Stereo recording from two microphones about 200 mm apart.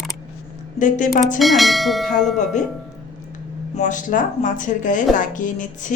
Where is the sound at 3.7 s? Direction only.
40° left (ahead or behind).